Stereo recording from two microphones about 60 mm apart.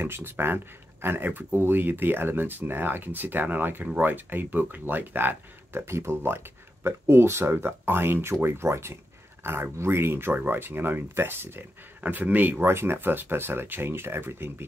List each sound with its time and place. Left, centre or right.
0.0 s speech: right
12.6 s speech: right